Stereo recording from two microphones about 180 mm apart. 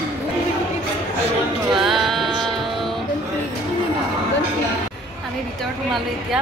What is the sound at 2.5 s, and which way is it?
Music, centre (ahead or behind).